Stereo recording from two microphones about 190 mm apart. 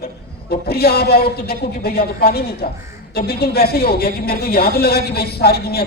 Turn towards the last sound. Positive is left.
turn(degrees=55)  # may be behind; listen again after turning